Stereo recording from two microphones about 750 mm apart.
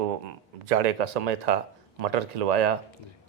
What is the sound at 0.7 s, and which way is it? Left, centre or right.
Speech, right.